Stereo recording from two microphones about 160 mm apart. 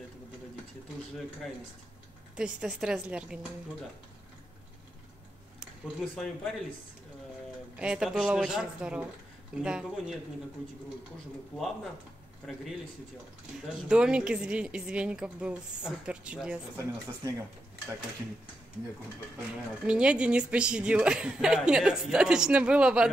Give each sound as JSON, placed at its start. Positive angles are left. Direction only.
{"t": 2.3, "sound": "a woman's voice", "side_deg": -5}
{"t": 5.6, "sound": "speech", "side_deg": 0}
{"t": 7.7, "sound": "a woman's voice", "side_deg": -5}
{"t": 13.8, "sound": "a woman's voice", "side_deg": -5}
{"t": 19.8, "sound": "a woman's voice", "side_deg": -5}